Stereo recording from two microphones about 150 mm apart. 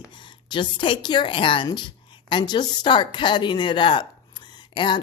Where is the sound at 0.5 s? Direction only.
30° left (ahead or behind).